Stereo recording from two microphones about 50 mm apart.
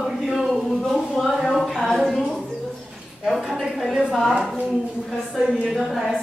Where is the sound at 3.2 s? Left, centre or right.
Centre.